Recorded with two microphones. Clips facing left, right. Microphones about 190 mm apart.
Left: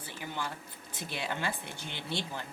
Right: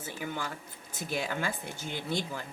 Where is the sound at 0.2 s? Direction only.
50° right (ahead or behind).